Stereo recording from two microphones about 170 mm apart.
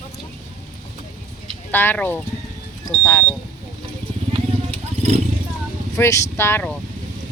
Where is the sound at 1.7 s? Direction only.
10° left (ahead or behind).